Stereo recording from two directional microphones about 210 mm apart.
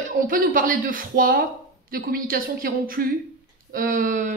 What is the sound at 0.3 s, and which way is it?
A woman's voice, 40° right (ahead or behind).